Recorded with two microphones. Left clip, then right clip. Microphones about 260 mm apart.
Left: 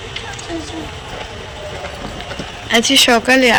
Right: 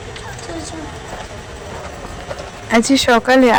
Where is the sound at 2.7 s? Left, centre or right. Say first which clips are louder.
Left 2 dB; centre.